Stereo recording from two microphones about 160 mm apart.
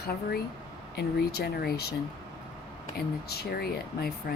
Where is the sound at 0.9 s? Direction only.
90° left.